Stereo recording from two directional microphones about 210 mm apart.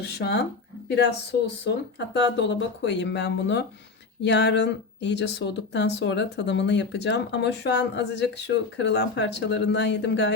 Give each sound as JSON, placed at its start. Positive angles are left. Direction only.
{"t": 0.0, "sound": "speech", "side_deg": 55}